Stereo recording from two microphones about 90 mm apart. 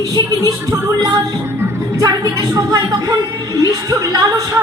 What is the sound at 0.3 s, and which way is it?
A woman's voice, 40° right (ahead or behind).